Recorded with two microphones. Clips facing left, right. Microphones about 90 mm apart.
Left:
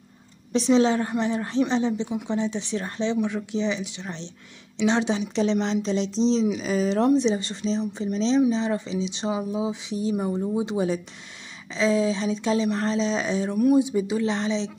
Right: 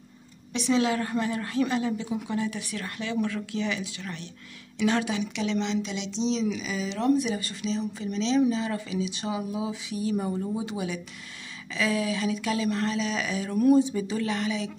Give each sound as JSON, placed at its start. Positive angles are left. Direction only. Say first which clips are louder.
{"t": 0.5, "sound": "speech", "louder": "left 5 dB", "side_deg": 30}
{"t": 7.1, "sound": "speech", "louder": "left 4 dB", "side_deg": 25}
{"t": 13.6, "sound": "speech", "louder": "even", "side_deg": 10}